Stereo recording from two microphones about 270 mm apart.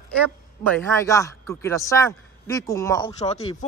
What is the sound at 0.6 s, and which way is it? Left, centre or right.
Speech, centre.